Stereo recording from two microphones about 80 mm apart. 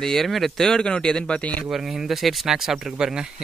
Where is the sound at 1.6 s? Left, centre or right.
Centre.